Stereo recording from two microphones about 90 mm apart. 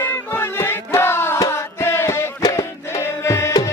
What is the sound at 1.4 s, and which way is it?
Music, 35° left (ahead or behind).